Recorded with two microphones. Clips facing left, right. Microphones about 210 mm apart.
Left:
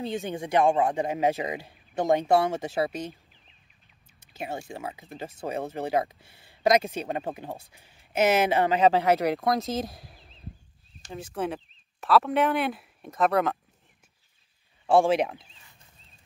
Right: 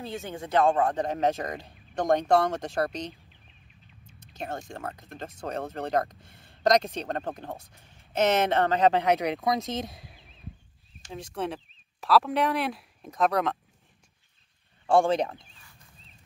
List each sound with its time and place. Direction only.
0.0 s speech: 15° left (ahead or behind)
4.2 s speech: 10° left (ahead or behind)
14.9 s speech: 5° left (ahead or behind)